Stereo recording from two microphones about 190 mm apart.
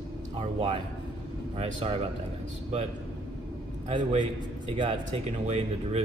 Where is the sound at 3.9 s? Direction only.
25° right (ahead or behind).